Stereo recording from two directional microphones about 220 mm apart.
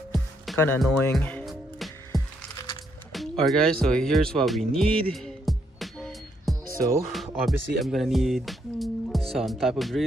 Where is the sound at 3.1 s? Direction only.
Centre (ahead or behind).